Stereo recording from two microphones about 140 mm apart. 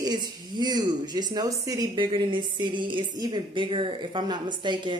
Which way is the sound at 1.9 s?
35° right (ahead or behind).